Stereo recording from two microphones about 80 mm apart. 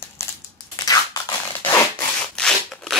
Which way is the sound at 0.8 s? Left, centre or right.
Left.